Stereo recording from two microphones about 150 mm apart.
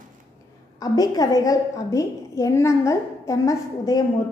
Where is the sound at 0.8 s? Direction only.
25° left (ahead or behind).